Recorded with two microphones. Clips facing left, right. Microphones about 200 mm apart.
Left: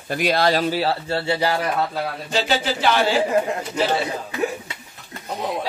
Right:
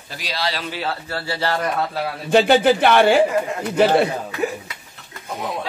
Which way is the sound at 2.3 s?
55° right (ahead or behind).